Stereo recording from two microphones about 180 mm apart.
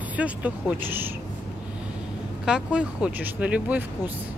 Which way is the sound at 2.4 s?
5° right (ahead or behind).